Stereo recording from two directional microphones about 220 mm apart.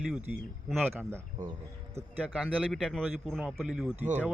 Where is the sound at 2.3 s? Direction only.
Centre (ahead or behind).